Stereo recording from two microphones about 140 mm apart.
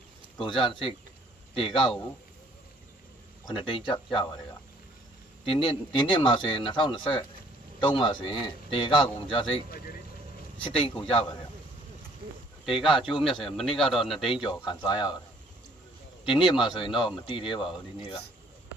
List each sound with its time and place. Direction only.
0.4 s speech: 40° left (ahead or behind)
3.4 s speech: 35° left (ahead or behind)
5.4 s speech: 40° left (ahead or behind)
10.7 s speech: 40° left (ahead or behind)
12.6 s speech: centre (ahead or behind)
14.1 s speech: 40° left (ahead or behind)
16.3 s speech: 35° left (ahead or behind)